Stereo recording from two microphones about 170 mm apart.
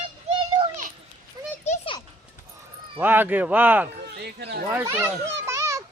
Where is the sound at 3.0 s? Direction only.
10° right (ahead or behind).